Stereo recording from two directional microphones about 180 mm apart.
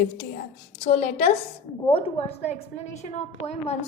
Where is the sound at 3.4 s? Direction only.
35° left (ahead or behind).